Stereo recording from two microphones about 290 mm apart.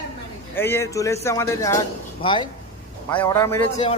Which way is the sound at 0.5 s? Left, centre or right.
Centre.